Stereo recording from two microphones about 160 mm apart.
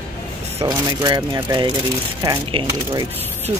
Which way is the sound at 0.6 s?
25° right (ahead or behind).